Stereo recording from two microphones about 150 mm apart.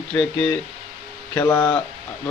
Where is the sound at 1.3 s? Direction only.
15° left (ahead or behind).